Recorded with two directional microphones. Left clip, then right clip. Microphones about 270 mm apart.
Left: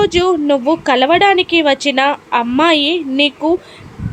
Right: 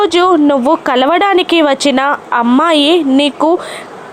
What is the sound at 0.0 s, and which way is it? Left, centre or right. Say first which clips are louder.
Speech: right 4 dB; centre.